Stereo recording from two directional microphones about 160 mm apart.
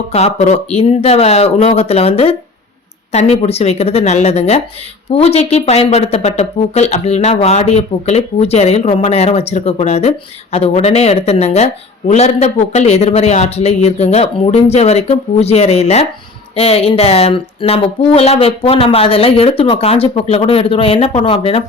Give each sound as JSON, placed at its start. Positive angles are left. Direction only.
{"t": 0.1, "sound": "a woman's voice", "side_deg": 40}